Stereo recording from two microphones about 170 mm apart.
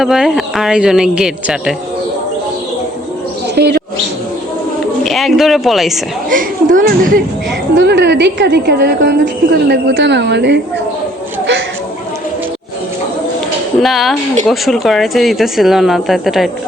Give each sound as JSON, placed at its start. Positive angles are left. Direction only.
{"t": 0.0, "sound": "speech", "side_deg": 0}
{"t": 3.5, "sound": "bird", "side_deg": -75}
{"t": 5.0, "sound": "speech", "side_deg": 0}
{"t": 6.3, "sound": "speech", "side_deg": -50}
{"t": 7.8, "sound": "a woman's voice", "side_deg": -90}
{"t": 13.8, "sound": "speech", "side_deg": 0}